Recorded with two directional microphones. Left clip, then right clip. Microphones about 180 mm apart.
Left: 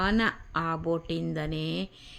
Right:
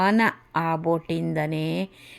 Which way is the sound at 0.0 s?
20° right (ahead or behind).